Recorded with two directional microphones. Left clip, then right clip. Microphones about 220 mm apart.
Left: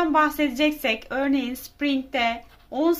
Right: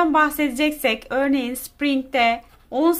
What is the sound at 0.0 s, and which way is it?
A woman's voice, 20° right (ahead or behind).